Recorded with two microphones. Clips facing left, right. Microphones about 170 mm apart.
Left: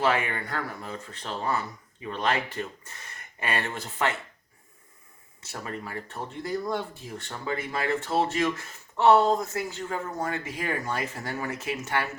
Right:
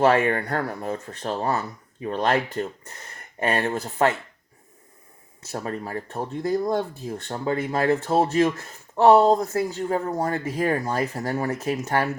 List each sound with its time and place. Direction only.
0.0 s speech: 45° right (ahead or behind)
3.4 s speech: 40° right (ahead or behind)
5.5 s speech: 40° right (ahead or behind)